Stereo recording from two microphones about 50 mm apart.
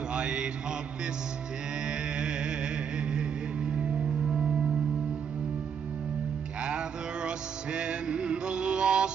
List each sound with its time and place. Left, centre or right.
0.1 s mantra: centre
1.9 s music: centre
4.3 s music: centre
6.6 s music: centre